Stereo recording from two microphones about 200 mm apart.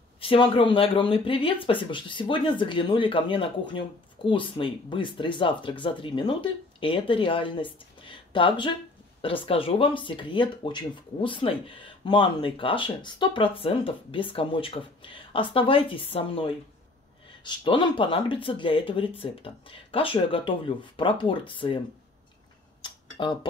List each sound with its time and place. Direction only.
0.2 s speech: 25° left (ahead or behind)
22.8 s tick-tock: 25° left (ahead or behind)